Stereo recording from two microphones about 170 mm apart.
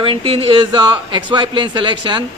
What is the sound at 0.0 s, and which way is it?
Speech, 35° right (ahead or behind).